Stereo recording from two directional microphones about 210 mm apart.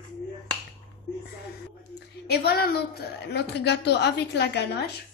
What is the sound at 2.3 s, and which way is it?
A woman's voice, 50° left (ahead or behind).